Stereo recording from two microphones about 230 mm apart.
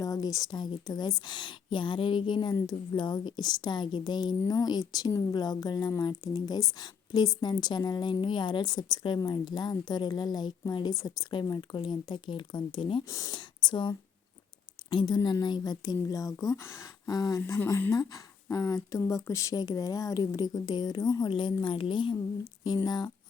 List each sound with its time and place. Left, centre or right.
0.0 s a woman's voice: centre